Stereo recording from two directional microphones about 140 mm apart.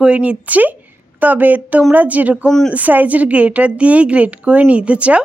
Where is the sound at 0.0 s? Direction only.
10° right (ahead or behind).